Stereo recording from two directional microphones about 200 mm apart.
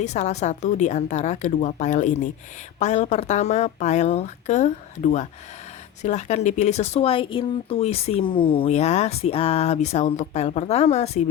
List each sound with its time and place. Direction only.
0.0 s speech: 35° left (ahead or behind)